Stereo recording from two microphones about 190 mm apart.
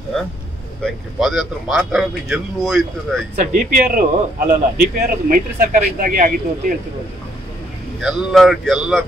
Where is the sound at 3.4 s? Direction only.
40° right (ahead or behind).